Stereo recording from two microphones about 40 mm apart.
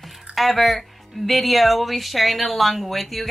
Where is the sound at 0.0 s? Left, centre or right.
Centre.